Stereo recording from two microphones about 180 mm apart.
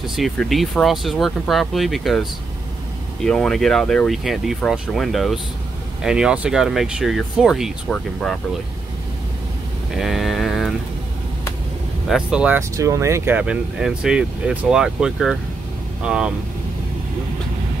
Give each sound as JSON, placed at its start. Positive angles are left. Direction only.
{"t": 0.0, "sound": "speech", "side_deg": 0}
{"t": 9.9, "sound": "a sound", "side_deg": 0}
{"t": 12.1, "sound": "speech", "side_deg": -5}